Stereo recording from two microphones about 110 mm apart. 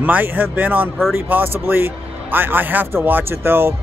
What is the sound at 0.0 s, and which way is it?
Speech, 15° right (ahead or behind).